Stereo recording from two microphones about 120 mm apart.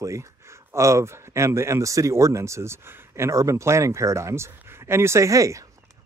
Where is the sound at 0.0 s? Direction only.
25° right (ahead or behind).